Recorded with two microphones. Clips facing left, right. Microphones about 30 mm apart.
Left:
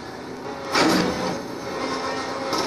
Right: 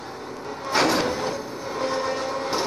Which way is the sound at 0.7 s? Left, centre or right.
Centre.